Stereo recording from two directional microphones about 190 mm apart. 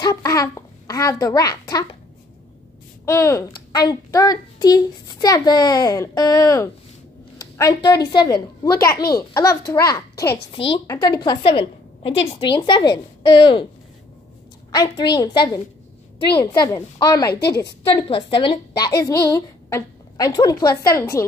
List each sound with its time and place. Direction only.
0.0 s a child's voice: 15° left (ahead or behind)
3.1 s a child's voice: 15° left (ahead or behind)
10.2 s a woman's voice: 60° left (ahead or behind)
10.5 s a child's voice: 30° left (ahead or behind)
14.7 s a child's voice: 20° left (ahead or behind)
17.3 s a woman's voice: 60° left (ahead or behind)
17.8 s a child's voice: 30° left (ahead or behind)